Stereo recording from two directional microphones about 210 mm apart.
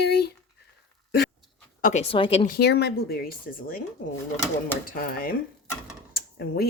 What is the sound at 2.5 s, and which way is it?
Speech, 50° left (ahead or behind).